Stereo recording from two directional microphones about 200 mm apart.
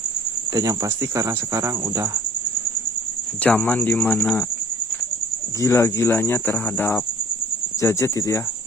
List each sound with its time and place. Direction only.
0.5 s cricket: 15° right (ahead or behind)
3.4 s speech: 10° left (ahead or behind)
5.6 s speech: 15° left (ahead or behind)